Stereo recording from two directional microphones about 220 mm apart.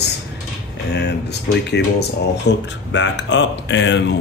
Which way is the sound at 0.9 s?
50° left (ahead or behind).